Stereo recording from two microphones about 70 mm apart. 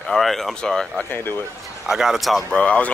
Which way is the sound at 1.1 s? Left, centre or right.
Left.